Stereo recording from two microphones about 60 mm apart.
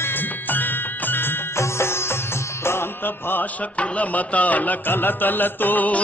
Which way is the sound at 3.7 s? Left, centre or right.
Left.